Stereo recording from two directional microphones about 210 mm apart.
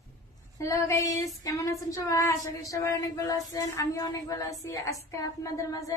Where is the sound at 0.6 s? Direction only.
15° left (ahead or behind).